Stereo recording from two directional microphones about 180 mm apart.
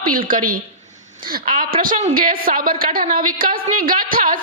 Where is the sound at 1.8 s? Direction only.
45° right (ahead or behind).